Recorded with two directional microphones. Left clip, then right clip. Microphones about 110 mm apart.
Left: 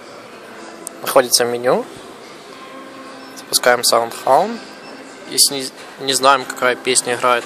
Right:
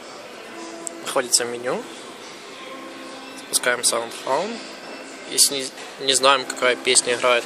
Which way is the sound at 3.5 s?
60° left (ahead or behind).